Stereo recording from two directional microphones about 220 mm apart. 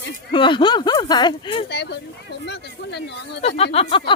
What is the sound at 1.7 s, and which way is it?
Speech, 50° left (ahead or behind).